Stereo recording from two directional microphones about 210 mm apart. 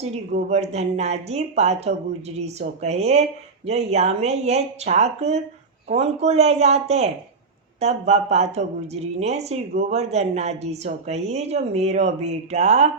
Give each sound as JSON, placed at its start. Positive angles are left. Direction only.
{"t": 0.0, "sound": "speech", "side_deg": -35}